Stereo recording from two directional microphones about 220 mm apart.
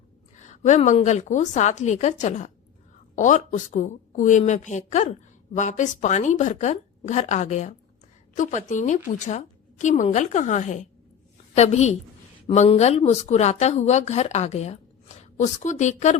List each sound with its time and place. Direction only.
0.3 s a woman's voice: 35° left (ahead or behind)